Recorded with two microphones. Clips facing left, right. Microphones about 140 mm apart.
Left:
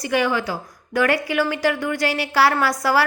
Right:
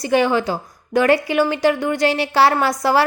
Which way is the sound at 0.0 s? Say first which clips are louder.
Right 4 dB; 30° right (ahead or behind).